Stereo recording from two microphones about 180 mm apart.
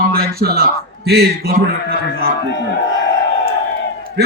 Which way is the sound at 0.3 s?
60° right (ahead or behind).